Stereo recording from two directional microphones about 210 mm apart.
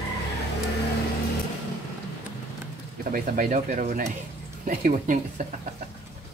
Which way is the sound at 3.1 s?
40° right (ahead or behind).